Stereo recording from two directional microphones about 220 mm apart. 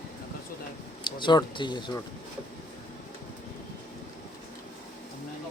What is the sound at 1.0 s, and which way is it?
Speech, 20° left (ahead or behind).